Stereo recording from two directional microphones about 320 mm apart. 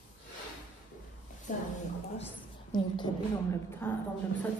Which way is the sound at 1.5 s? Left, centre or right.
Left.